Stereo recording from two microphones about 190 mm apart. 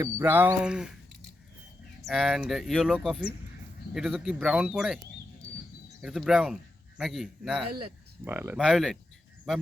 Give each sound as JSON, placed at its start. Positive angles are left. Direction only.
{"t": 0.0, "sound": "speech", "side_deg": -10}
{"t": 2.0, "sound": "speech", "side_deg": 0}
{"t": 6.0, "sound": "a man's voice", "side_deg": -5}
{"t": 8.2, "sound": "speech", "side_deg": -10}
{"t": 8.6, "sound": "speech", "side_deg": 0}